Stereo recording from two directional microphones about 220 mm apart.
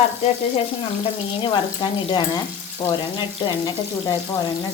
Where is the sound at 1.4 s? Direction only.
20° left (ahead or behind).